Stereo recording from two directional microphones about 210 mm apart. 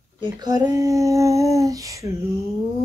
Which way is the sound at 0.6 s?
15° right (ahead or behind).